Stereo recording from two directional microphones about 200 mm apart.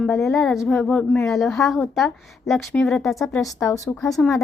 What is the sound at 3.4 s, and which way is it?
Speech, 15° left (ahead or behind).